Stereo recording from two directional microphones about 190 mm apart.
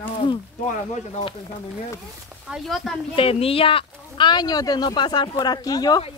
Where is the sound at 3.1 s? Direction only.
30° left (ahead or behind).